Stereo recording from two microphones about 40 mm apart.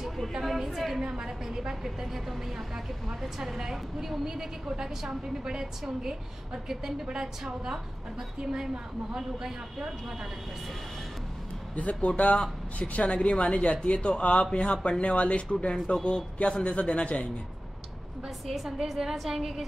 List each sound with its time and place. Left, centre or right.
0.0 s a woman's voice: centre
1.0 s a woman's voice: centre
11.7 s speech: left
18.7 s a woman's voice: centre